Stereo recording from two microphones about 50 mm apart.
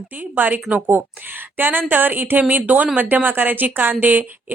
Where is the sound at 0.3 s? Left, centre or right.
Right.